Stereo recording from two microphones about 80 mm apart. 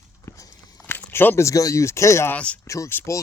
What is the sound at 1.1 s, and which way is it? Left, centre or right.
Speech, left.